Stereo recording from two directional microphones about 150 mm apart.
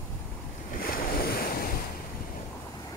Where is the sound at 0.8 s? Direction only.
75° left (ahead or behind).